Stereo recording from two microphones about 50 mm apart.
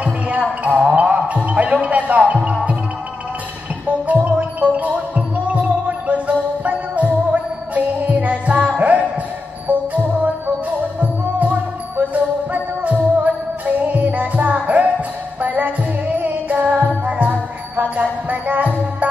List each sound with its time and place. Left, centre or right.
0.0 s music: right
3.8 s music: right
11.0 s music: right